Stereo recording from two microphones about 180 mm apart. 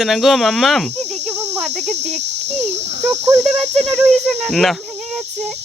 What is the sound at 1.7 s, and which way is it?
Cricket, 40° right (ahead or behind).